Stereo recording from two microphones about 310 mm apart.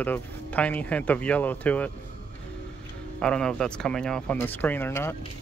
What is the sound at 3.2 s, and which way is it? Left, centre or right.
Speech, centre.